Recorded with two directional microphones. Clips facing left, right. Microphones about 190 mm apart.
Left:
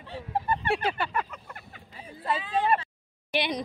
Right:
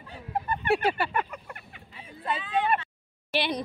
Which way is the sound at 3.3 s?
15° left (ahead or behind).